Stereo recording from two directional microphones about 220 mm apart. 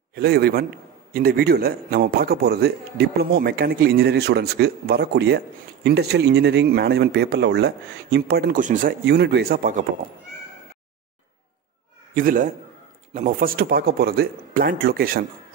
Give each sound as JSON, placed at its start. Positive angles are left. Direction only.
{"t": 0.1, "sound": "a man's voice", "side_deg": -45}
{"t": 9.0, "sound": "a man's voice", "side_deg": -50}
{"t": 12.1, "sound": "a man's voice", "side_deg": -35}